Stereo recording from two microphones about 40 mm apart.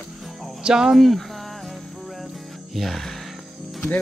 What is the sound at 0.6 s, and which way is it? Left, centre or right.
Speech, centre.